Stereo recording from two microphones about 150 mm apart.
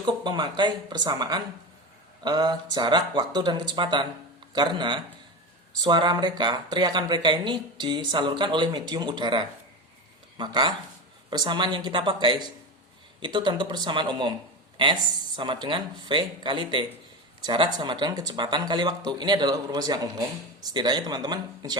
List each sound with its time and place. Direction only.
0.0 s speech: 30° right (ahead or behind)
15.4 s speech: 30° right (ahead or behind)